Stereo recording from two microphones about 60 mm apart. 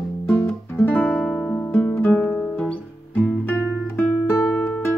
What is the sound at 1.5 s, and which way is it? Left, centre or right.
Music, left.